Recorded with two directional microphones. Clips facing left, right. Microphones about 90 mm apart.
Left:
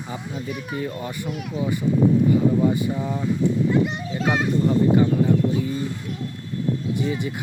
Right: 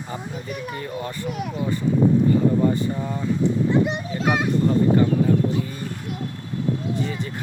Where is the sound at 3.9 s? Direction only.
15° right (ahead or behind).